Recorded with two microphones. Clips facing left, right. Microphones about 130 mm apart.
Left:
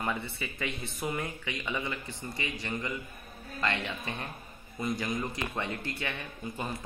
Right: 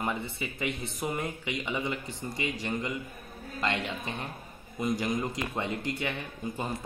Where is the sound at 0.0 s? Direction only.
15° right (ahead or behind).